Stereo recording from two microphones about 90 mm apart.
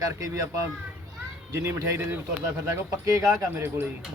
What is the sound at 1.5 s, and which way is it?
Speech, 35° right (ahead or behind).